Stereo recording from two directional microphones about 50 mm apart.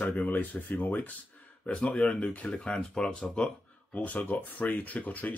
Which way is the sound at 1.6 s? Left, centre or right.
Left.